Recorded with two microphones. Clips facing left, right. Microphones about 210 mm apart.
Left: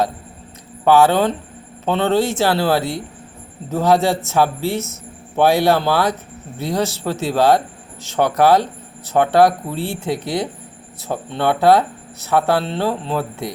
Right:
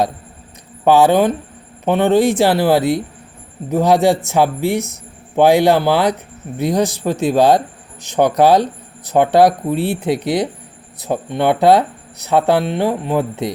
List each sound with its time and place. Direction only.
0.9 s speech: 15° right (ahead or behind)